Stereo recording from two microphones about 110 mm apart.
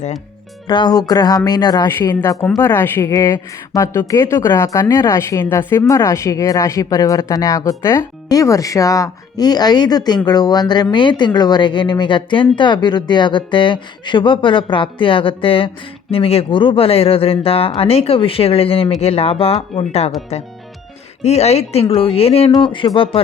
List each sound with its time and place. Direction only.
0.7 s speech: 40° left (ahead or behind)
2.6 s a woman's voice: 20° left (ahead or behind)
3.1 s a woman's voice: 30° left (ahead or behind); by 20.1 s 70° left (ahead or behind)
21.2 s a woman's voice: 75° left (ahead or behind)
22.5 s speech: 50° left (ahead or behind)